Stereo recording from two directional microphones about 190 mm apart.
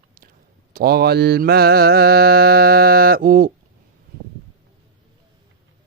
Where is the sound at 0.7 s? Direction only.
55° right (ahead or behind).